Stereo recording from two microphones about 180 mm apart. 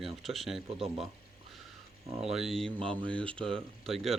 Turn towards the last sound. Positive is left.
turn(degrees=0)  # may be behind; listen again after turning